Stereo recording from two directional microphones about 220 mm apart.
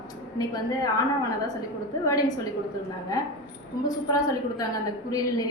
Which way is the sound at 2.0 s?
15° left (ahead or behind).